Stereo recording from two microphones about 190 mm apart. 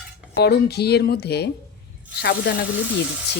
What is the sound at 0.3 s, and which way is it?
Speech, 60° left (ahead or behind).